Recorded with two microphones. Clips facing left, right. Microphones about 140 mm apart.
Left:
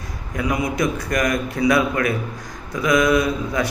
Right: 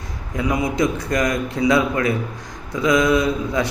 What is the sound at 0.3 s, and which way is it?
A man's voice, 25° right (ahead or behind).